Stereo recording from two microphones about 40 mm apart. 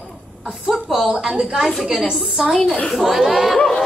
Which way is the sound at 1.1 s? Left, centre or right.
Centre.